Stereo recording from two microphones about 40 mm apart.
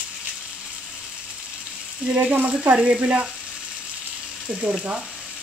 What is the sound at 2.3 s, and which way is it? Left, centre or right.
Speech, right.